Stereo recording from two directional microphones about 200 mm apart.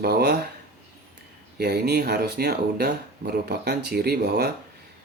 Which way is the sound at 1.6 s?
55° right (ahead or behind).